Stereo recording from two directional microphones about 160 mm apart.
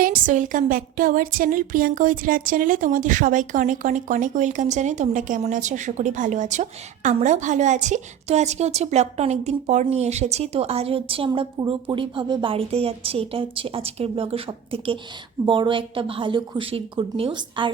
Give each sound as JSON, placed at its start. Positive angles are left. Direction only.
{"t": 0.0, "sound": "a woman's voice", "side_deg": -55}